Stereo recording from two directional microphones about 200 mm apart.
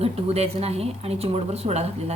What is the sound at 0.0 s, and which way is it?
A woman's voice, 30° right (ahead or behind).